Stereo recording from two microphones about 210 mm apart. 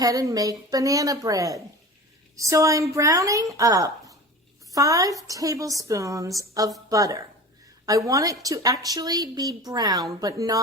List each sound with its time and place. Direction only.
0.0 s a woman's voice: 15° right (ahead or behind)